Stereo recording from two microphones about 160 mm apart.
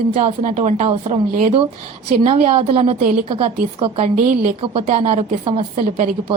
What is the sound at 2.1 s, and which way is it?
A woman's voice, 40° right (ahead or behind).